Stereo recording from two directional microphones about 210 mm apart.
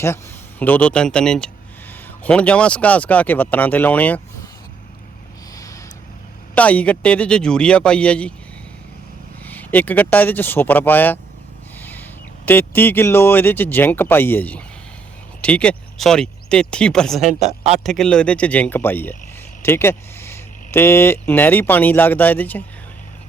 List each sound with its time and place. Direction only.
0.6 s a man's voice: 5° left (ahead or behind)
6.5 s a man's voice: 5° left (ahead or behind)
9.5 s speech: 10° left (ahead or behind)
11.8 s a sound: 10° left (ahead or behind)
12.5 s speech: 10° left (ahead or behind)
17.4 s speech: 30° right (ahead or behind)
17.8 s a man's voice: centre (ahead or behind)